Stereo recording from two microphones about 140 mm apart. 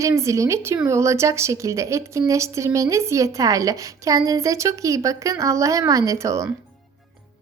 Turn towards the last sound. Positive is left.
turn(degrees=-20)  # may be behind; listen again after turning